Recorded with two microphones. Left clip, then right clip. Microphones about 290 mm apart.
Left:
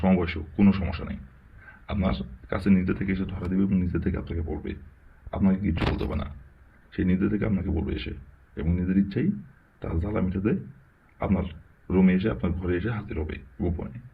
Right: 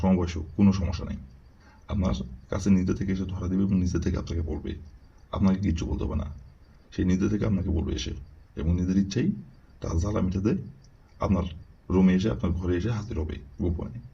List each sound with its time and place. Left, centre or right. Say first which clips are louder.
0.0 s speech: left 2 dB; centre